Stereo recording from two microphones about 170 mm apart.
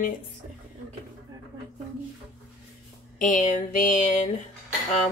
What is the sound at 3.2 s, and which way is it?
A woman's voice, 50° left (ahead or behind).